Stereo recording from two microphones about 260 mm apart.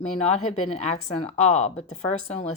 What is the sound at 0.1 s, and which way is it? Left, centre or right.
Speech, left.